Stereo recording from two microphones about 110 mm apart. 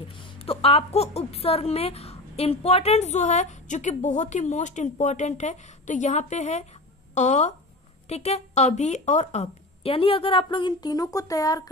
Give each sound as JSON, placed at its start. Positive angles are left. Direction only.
{"t": 0.1, "sound": "a woman's voice", "side_deg": 50}
{"t": 8.1, "sound": "a woman's voice", "side_deg": 75}